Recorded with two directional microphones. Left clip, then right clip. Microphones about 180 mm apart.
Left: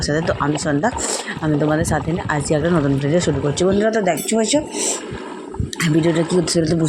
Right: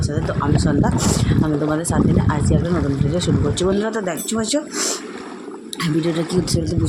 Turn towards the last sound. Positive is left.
turn(degrees=5)  # may be behind; listen again after turning